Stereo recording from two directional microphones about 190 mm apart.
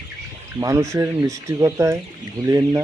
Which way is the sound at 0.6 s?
15° right (ahead or behind).